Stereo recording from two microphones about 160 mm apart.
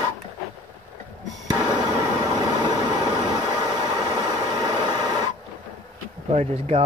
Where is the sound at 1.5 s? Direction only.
25° right (ahead or behind).